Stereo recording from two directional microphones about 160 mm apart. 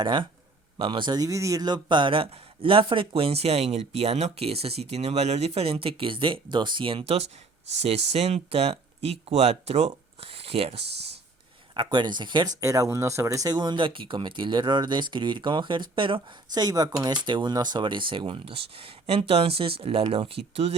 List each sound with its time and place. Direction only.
0.0 s speech: 30° right (ahead or behind)
10.8 s a sound: 90° right
11.7 s speech: 30° right (ahead or behind)